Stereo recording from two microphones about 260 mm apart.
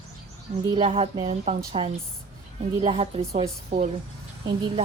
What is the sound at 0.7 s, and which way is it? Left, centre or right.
Speech, right.